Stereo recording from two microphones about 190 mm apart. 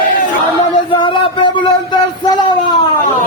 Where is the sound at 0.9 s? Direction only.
25° left (ahead or behind).